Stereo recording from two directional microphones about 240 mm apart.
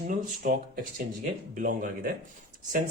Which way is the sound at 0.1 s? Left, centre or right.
Right.